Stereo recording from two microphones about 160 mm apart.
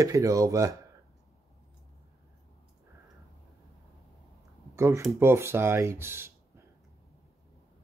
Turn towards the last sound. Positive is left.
turn(degrees=-15)  # may be behind; listen again after turning